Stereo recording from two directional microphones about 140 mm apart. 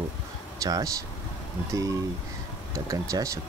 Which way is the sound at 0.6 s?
25° right (ahead or behind).